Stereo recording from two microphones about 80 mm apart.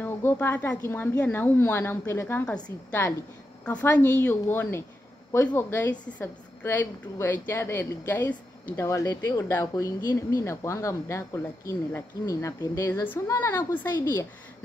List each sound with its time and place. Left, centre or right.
0.0 s a woman's voice: left
2.4 s a woman's voice: centre
3.8 s a woman's voice: left
8.8 s speech: left
13.4 s a woman's voice: left